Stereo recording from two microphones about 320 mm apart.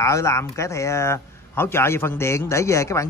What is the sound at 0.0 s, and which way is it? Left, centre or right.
A man's voice, centre.